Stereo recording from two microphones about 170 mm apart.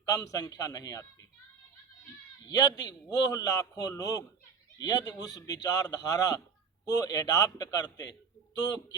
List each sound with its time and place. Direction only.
0.0 s a man's voice: 20° left (ahead or behind)
2.4 s a man's voice: 20° left (ahead or behind)